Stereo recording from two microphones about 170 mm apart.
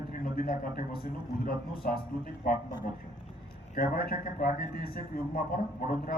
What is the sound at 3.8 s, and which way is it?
A man's voice, 60° left (ahead or behind).